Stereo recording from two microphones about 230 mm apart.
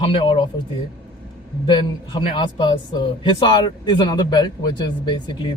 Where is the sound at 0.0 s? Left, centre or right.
Left.